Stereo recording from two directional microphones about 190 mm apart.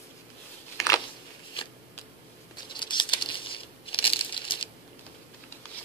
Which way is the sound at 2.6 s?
25° left (ahead or behind).